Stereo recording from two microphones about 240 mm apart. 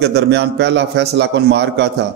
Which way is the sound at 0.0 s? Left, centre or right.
Right.